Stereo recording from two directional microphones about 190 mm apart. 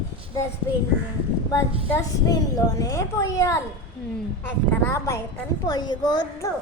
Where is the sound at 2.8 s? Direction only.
15° left (ahead or behind).